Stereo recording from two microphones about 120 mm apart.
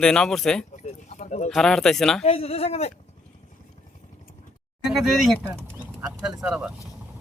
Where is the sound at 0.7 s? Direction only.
90° left.